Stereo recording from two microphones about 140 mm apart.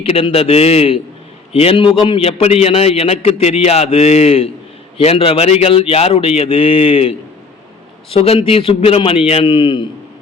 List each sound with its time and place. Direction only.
0.0 s a man's voice: 40° left (ahead or behind)